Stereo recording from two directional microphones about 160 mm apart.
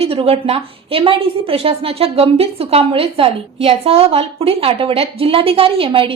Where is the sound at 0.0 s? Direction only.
35° right (ahead or behind).